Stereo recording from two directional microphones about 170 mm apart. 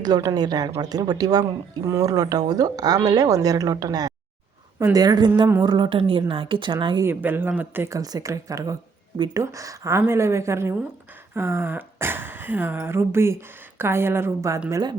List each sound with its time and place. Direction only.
0.0 s speech: 20° right (ahead or behind)
7.1 s speech: 10° right (ahead or behind)